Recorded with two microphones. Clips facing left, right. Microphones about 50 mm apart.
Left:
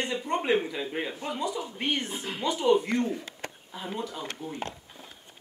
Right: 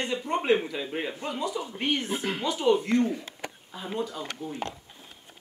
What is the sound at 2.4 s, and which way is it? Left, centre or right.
Speech, centre.